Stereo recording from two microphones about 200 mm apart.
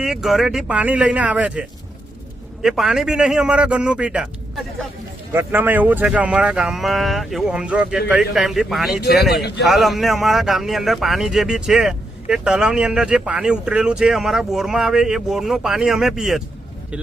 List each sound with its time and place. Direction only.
0.0 s speech: centre (ahead or behind)
9.3 s a man's voice: 55° left (ahead or behind)
9.6 s speech: centre (ahead or behind)